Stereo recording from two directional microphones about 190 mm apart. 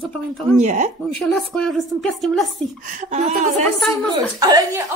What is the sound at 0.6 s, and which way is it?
Speech, 40° right (ahead or behind).